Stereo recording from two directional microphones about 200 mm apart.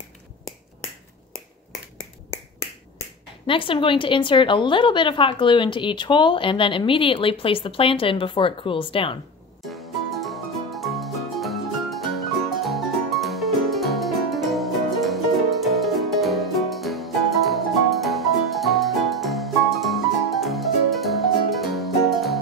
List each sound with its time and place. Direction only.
3.4 s a woman's voice: 25° left (ahead or behind)
9.6 s music: centre (ahead or behind)